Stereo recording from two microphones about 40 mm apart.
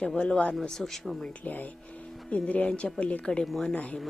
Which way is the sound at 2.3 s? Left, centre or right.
Left.